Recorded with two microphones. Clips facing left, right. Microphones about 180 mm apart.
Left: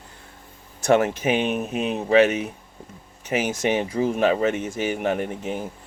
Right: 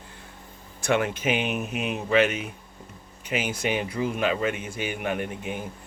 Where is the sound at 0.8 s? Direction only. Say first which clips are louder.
Left 6 dB; 40° left (ahead or behind).